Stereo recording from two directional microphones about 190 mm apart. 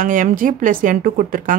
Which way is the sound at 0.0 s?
45° right (ahead or behind).